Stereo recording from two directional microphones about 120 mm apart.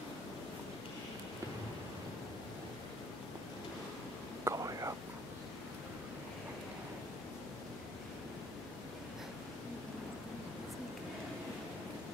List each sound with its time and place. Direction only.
4.5 s whispering: 25° right (ahead or behind)